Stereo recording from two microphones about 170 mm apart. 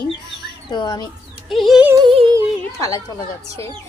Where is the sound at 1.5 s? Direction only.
Centre (ahead or behind).